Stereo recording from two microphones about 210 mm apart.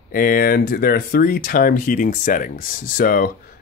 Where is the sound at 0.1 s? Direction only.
45° left (ahead or behind).